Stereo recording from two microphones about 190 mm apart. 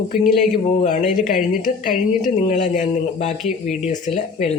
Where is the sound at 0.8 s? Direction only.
40° left (ahead or behind).